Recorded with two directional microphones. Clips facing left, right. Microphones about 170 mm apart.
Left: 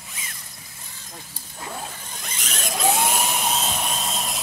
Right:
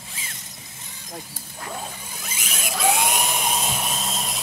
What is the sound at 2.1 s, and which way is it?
Zipper, 5° right (ahead or behind).